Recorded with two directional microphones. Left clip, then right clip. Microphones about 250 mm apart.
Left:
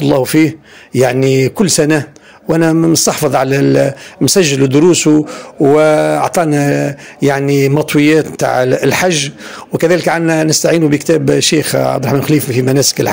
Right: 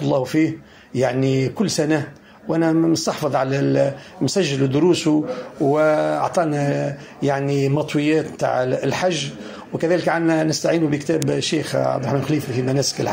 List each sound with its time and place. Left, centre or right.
0.0 s a man's voice: left